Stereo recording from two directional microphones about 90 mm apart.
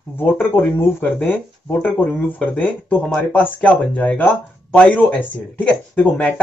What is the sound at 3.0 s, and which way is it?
Speech, 5° left (ahead or behind).